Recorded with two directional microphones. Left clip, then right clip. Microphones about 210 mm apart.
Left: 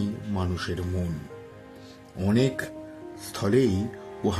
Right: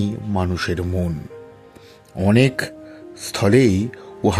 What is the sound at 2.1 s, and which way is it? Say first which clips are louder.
Speech: right 8 dB; 35° right (ahead or behind).